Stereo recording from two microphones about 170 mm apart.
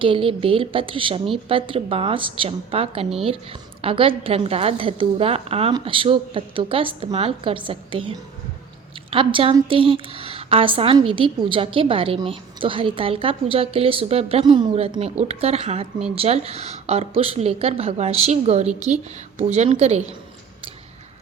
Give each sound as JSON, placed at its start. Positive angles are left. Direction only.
{"t": 0.0, "sound": "a woman's voice", "side_deg": -30}